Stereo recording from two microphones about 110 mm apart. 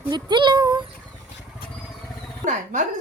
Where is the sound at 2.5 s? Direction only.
90° right.